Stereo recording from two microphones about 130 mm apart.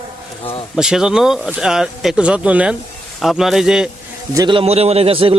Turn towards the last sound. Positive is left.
turn(degrees=-45)  # may be behind; listen again after turning